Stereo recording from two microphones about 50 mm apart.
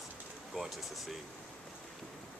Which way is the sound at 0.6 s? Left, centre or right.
Centre.